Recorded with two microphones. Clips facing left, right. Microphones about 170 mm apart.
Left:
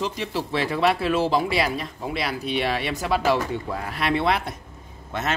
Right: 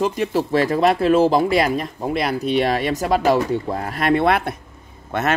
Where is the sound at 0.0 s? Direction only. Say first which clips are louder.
Right 7 dB; 50° right (ahead or behind).